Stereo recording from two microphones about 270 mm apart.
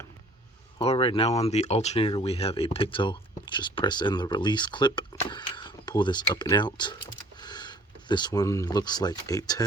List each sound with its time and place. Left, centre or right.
0.8 s speech: centre